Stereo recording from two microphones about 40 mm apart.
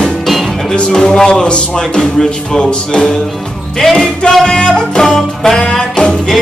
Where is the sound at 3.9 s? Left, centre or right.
Left.